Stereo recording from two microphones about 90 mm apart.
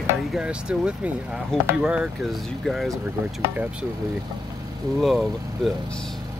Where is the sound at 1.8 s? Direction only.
10° right (ahead or behind).